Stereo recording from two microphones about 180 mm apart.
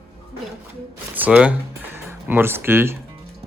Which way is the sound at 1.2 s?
10° right (ahead or behind).